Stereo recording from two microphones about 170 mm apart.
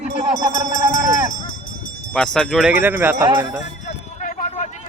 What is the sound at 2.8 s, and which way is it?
Speech, 10° right (ahead or behind).